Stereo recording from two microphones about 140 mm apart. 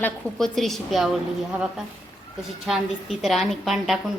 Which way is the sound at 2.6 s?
Centre (ahead or behind).